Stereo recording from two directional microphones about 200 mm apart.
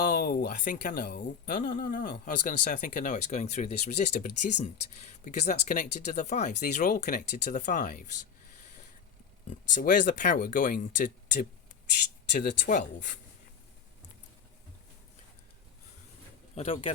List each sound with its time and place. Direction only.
0.1 s speech: 45° left (ahead or behind)
9.5 s speech: 40° left (ahead or behind)
12.6 s speech: 40° left (ahead or behind)
16.6 s speech: 30° left (ahead or behind)